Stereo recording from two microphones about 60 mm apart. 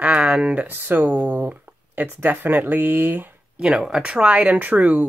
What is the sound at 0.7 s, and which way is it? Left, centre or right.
Speech, right.